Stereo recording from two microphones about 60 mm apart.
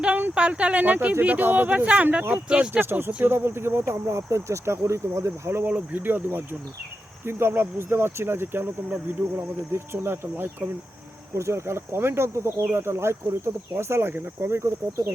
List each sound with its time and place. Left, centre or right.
0.0 s speech: right
1.7 s speech: right
2.8 s speech: right
5.6 s speech: right
11.3 s speech: right